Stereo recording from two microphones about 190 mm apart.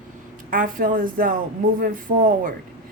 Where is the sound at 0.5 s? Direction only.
45° right (ahead or behind).